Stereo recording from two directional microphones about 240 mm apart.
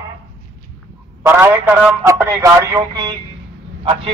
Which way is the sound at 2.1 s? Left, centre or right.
Centre.